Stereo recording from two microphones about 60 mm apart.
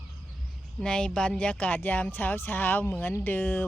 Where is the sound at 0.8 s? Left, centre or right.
Centre.